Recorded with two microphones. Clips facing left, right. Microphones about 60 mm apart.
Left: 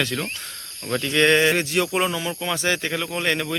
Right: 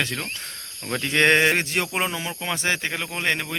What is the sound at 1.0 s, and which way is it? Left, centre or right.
Speech, right.